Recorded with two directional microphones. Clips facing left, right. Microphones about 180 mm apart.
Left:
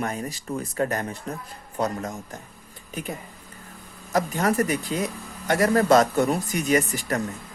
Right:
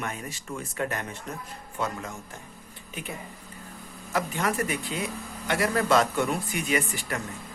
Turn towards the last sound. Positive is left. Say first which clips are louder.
# left 6 dB
turn(degrees=40)  # may be behind; listen again after turning